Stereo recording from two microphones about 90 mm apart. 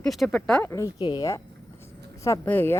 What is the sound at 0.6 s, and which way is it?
Speech, 40° left (ahead or behind).